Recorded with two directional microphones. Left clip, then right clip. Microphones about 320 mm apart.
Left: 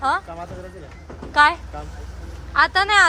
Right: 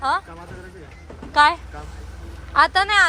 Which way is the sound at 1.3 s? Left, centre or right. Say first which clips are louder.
Even; centre.